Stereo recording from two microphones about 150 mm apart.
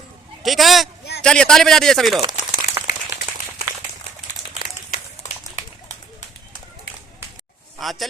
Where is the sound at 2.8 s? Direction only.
20° right (ahead or behind).